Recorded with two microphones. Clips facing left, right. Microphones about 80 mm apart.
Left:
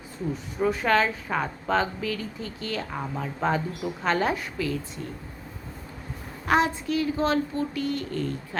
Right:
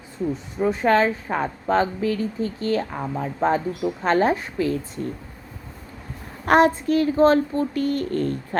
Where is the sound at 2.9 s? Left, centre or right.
Right.